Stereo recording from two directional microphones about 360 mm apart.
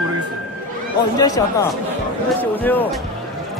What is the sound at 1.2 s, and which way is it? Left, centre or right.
Speech, centre.